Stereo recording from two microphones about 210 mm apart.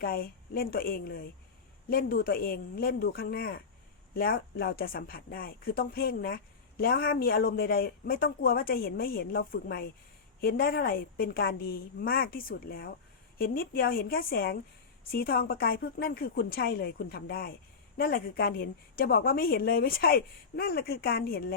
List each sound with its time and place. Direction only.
0.0 s speech: 45° left (ahead or behind)